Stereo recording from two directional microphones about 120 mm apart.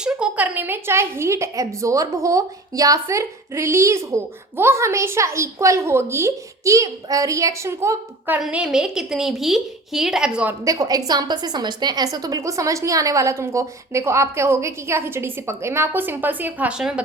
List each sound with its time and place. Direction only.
0.0 s a woman's voice: 10° right (ahead or behind)
8.4 s a woman's voice: 5° right (ahead or behind)
10.6 s a woman's voice: 30° right (ahead or behind); by 17.0 s 5° right (ahead or behind)